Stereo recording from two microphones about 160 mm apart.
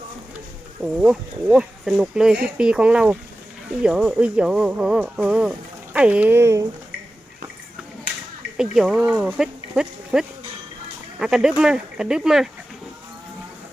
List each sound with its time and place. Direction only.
0.8 s speech: 5° right (ahead or behind)
8.5 s speech: 5° right (ahead or behind)